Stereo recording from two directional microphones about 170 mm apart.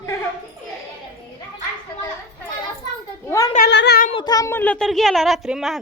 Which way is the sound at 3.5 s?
80° left.